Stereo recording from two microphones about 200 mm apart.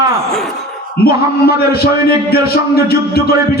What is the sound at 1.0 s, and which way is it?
Speech, 50° left (ahead or behind).